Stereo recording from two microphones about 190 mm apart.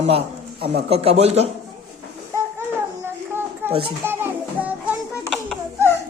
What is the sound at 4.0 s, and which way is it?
Child singing, 10° right (ahead or behind).